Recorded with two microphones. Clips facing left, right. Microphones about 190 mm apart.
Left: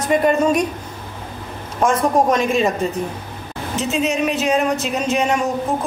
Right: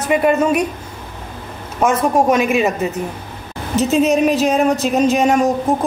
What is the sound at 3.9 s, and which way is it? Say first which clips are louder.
Speech: right 6 dB; 45° right (ahead or behind).